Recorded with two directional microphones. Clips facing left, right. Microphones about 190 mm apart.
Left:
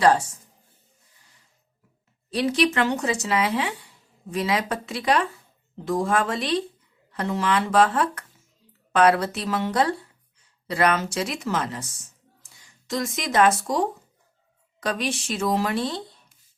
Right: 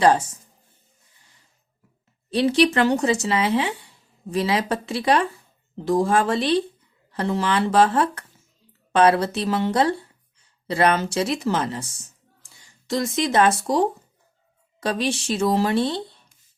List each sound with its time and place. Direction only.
2.3 s speech: 30° right (ahead or behind)
12.9 s speech: 30° right (ahead or behind)